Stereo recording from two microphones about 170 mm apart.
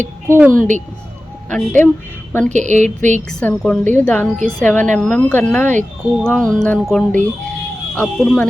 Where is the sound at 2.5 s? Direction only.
45° right (ahead or behind).